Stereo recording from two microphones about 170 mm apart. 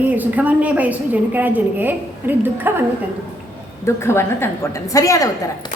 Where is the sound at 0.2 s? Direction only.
10° right (ahead or behind).